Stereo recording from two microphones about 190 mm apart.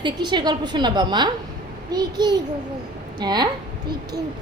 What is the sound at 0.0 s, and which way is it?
A woman's voice, 25° right (ahead or behind).